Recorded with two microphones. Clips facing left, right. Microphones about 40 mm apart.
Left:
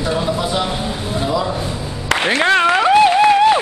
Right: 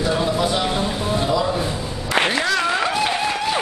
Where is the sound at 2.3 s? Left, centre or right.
Left.